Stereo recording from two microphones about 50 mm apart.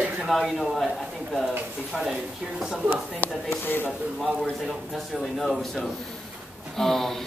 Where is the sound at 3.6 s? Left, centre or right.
Left.